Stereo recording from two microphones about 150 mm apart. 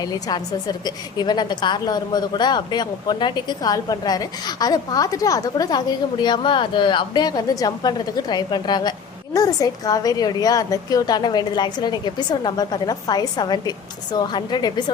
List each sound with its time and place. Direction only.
0.0 s a woman's voice: 25° left (ahead or behind)